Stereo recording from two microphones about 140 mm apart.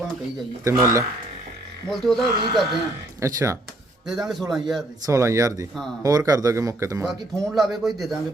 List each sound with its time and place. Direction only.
0.6 s speech: 20° right (ahead or behind)
1.9 s speech: centre (ahead or behind)
3.2 s speech: 20° right (ahead or behind)
4.3 s speech: centre (ahead or behind)
5.0 s speech: 20° right (ahead or behind)
7.1 s speech: centre (ahead or behind)